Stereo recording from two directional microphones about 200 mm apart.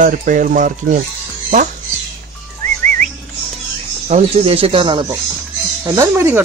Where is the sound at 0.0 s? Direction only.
40° right (ahead or behind).